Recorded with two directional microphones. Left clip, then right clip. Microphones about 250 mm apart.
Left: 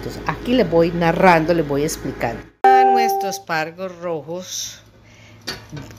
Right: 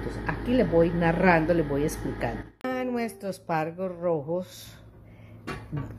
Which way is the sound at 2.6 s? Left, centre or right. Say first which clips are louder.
Left 18 dB; centre.